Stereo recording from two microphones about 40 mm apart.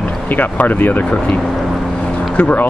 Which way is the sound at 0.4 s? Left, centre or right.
Left.